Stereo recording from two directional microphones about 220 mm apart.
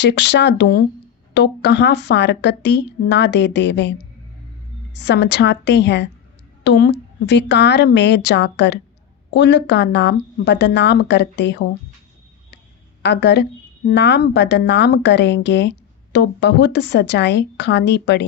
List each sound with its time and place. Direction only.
0.0 s a woman's voice: 55° left (ahead or behind)
5.0 s a woman's voice: 50° left (ahead or behind)
13.0 s a woman's voice: 50° left (ahead or behind)